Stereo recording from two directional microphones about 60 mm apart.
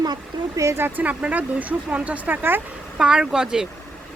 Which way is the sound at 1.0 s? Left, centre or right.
Right.